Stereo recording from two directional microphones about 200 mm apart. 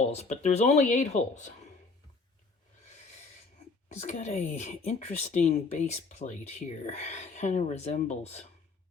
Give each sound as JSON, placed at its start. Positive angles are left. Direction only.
{"t": 0.1, "sound": "speech", "side_deg": 35}
{"t": 3.9, "sound": "speech", "side_deg": 35}